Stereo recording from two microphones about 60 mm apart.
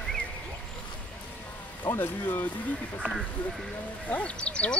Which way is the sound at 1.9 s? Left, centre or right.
Left.